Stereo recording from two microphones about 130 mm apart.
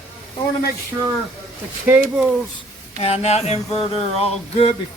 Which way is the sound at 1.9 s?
15° right (ahead or behind).